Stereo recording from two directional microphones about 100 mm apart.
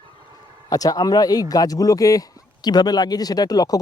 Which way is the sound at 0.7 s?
40° left (ahead or behind).